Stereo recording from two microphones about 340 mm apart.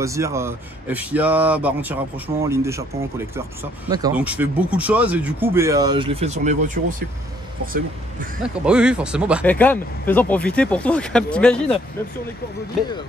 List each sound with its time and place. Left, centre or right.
0.0 s speech: centre
3.9 s speech: centre; by 8.3 s right
8.6 s speech: centre